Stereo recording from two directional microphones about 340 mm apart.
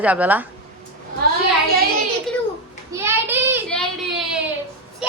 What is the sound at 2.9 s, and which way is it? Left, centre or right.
Child singing, centre.